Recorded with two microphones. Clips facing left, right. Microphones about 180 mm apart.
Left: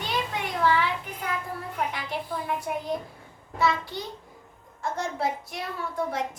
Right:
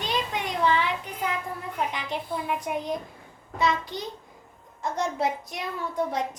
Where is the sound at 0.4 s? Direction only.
20° right (ahead or behind).